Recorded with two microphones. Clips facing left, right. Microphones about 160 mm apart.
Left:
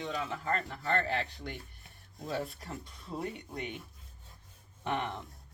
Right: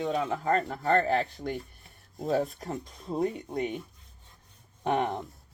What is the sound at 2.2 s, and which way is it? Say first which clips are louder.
Speech: right 9 dB; 45° right (ahead or behind).